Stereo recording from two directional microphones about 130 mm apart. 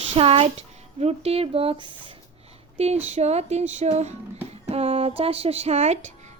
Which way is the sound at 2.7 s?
55° right (ahead or behind).